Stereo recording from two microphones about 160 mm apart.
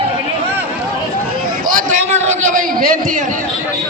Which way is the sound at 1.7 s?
55° right (ahead or behind).